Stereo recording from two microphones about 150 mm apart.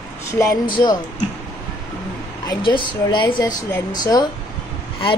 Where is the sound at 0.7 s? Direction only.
30° left (ahead or behind).